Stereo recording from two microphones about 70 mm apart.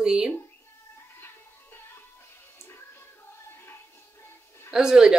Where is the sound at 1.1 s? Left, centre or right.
Left.